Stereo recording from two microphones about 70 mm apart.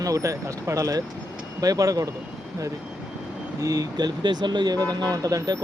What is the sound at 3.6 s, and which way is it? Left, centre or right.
Speech, right.